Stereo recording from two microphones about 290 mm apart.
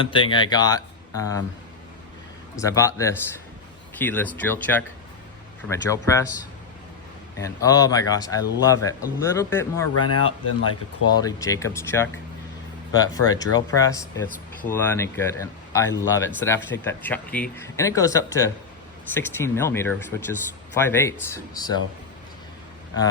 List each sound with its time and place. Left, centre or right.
0.0 s speech: centre
2.6 s speech: centre
7.3 s speech: centre
10.1 s speech: left
11.1 s speech: centre